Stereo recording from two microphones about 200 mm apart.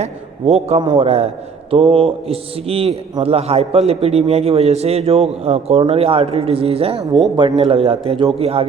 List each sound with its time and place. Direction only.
0.0 s a man's voice: 30° right (ahead or behind)